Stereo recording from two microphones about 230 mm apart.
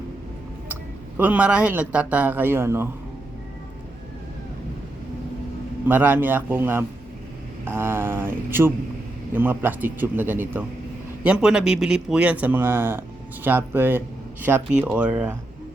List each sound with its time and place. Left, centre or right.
0.7 s a woman's voice: centre
5.9 s speech: centre
7.6 s mantra: centre
9.3 s a man's voice: centre